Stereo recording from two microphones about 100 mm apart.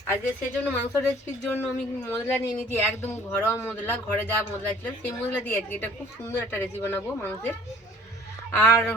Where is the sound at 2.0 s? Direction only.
25° left (ahead or behind).